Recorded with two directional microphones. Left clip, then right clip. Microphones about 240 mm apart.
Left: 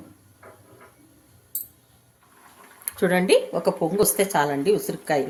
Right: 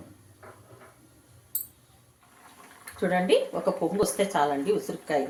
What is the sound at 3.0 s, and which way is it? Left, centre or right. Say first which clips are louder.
A woman's voice: left 4 dB; left.